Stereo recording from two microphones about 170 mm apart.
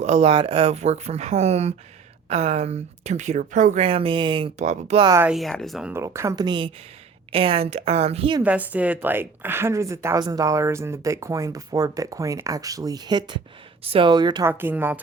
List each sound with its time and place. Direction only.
0.0 s speech: 40° right (ahead or behind)
5.0 s a woman's voice: 15° right (ahead or behind)
5.3 s speech: centre (ahead or behind)
5.9 s speech: 15° right (ahead or behind); by 8.4 s 35° right (ahead or behind)
8.4 s a woman's voice: 10° right (ahead or behind); by 14.4 s 25° right (ahead or behind)
14.4 s a woman's voice: 10° right (ahead or behind)